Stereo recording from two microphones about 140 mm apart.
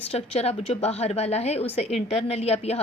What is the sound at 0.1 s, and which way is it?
A woman's voice, 50° left (ahead or behind).